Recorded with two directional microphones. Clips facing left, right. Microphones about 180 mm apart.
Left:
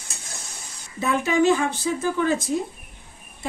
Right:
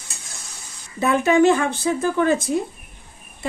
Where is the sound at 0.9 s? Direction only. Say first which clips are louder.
Right 5 dB; 60° right (ahead or behind).